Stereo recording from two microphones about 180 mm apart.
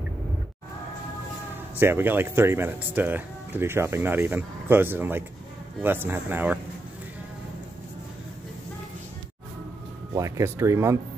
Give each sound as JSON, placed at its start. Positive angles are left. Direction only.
{"t": 1.8, "sound": "speech", "side_deg": -10}
{"t": 10.1, "sound": "speech", "side_deg": -15}